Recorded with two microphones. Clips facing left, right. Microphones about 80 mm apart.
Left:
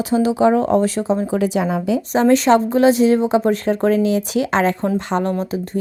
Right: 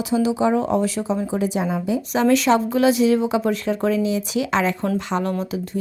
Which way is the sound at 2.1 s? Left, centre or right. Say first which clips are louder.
Left 4 dB; left.